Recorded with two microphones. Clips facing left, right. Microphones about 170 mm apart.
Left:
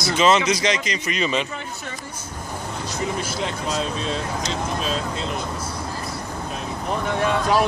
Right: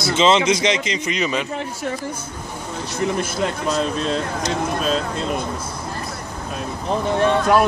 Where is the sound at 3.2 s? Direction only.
55° right (ahead or behind).